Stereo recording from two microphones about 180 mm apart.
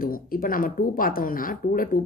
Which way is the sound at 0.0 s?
50° left (ahead or behind).